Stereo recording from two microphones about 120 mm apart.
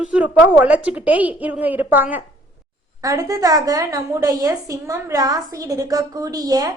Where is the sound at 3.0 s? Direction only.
30° right (ahead or behind).